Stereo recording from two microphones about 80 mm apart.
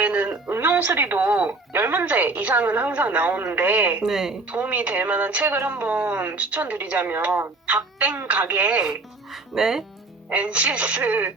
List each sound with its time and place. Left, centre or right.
0.0 s a sound: centre
0.4 s music: right
0.7 s speech: centre
4.0 s speech: centre
4.5 s speech: centre
10.2 s speech: centre